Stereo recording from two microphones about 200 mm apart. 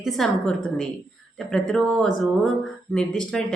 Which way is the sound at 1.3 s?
5° left (ahead or behind).